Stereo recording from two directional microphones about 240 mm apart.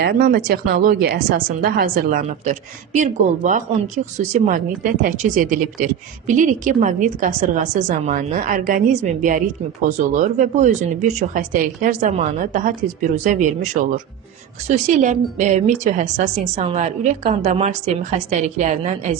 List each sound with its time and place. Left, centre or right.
0.0 s a woman's voice: right